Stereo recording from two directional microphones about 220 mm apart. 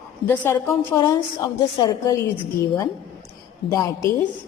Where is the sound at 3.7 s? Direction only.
15° left (ahead or behind).